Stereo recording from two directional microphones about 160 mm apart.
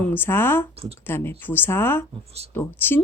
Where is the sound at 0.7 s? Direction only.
40° right (ahead or behind).